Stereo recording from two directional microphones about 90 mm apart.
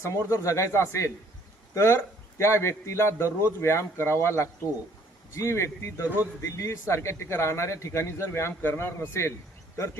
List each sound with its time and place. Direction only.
0.0 s speech: 35° left (ahead or behind)